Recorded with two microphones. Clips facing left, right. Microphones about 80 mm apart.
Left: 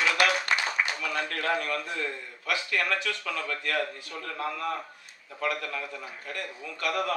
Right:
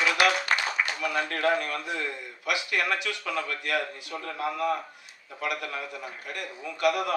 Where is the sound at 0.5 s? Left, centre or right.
Right.